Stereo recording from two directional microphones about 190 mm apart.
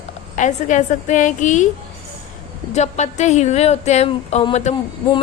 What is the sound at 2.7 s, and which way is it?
A woman's voice, 35° left (ahead or behind).